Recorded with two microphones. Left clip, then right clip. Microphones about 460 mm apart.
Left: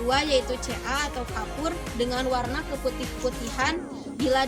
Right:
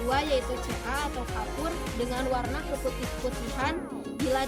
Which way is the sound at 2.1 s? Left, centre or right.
Right.